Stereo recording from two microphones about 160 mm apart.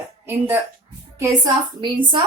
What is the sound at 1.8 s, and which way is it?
Speech, 30° right (ahead or behind).